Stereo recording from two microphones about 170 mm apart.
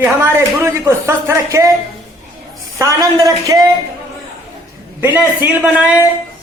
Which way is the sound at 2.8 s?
20° right (ahead or behind).